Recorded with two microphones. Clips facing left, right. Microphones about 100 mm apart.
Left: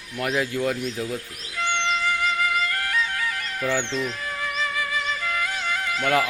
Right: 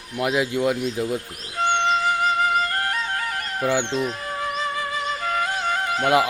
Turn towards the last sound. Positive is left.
turn(degrees=-40)  # may be behind; listen again after turning